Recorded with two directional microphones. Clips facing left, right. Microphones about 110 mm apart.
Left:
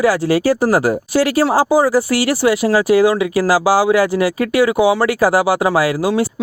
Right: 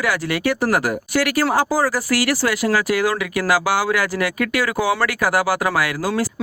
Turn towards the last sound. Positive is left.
turn(degrees=25)  # may be behind; listen again after turning